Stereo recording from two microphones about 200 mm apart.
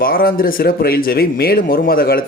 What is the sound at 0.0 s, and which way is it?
Speech, 45° left (ahead or behind).